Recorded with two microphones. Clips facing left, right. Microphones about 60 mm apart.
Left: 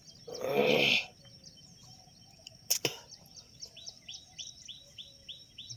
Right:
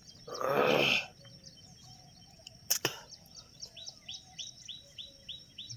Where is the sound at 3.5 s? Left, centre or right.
Left.